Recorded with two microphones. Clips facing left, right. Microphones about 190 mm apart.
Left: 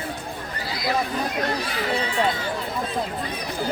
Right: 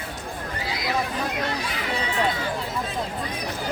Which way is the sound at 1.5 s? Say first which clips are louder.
Left 3 dB; 35° left (ahead or behind).